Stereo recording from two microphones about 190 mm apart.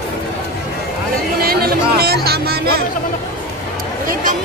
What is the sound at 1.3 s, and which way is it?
Music, 55° right (ahead or behind).